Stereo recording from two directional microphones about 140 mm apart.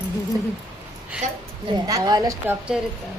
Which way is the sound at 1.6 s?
30° right (ahead or behind).